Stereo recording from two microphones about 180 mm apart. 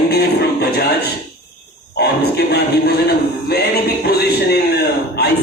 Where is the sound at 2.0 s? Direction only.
65° left (ahead or behind).